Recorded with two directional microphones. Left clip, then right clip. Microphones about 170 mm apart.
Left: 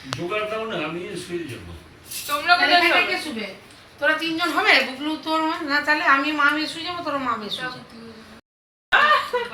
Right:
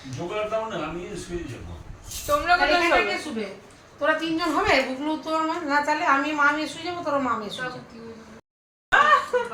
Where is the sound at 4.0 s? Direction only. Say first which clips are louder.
Left 2 dB; 45° right (ahead or behind); by 6.6 s 75° right (ahead or behind).